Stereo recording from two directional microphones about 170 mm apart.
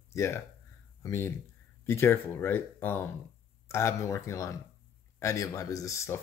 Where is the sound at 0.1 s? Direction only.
15° left (ahead or behind).